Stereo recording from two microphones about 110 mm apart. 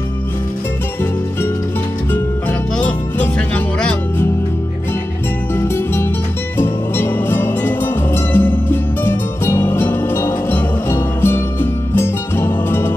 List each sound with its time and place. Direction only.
2.8 s music: 15° left (ahead or behind)
6.6 s music: 20° left (ahead or behind)